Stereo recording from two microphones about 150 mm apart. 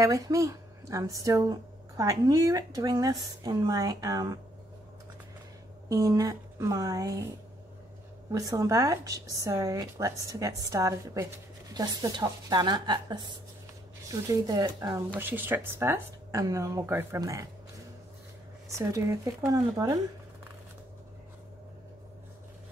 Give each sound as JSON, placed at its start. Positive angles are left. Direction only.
{"t": 0.0, "sound": "a woman's voice", "side_deg": -20}
{"t": 5.9, "sound": "a woman's voice", "side_deg": -25}
{"t": 8.3, "sound": "a woman's voice", "side_deg": -25}
{"t": 18.7, "sound": "a woman's voice", "side_deg": -20}